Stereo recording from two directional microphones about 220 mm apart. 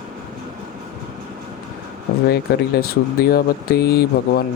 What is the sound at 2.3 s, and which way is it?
Speech, 45° left (ahead or behind).